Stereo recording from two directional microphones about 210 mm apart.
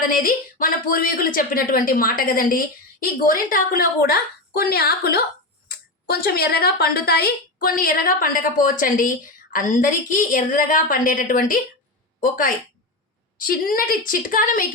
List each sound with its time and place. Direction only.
0.1 s speech: 40° left (ahead or behind)
13.4 s speech: 45° left (ahead or behind)